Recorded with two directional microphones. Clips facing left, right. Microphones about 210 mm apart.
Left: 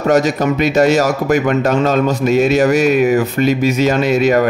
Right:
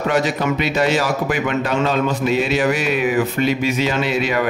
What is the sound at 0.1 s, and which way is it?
Speech, 45° left (ahead or behind).